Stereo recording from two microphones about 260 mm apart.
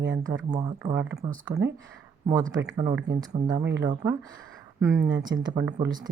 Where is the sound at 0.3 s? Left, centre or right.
Centre.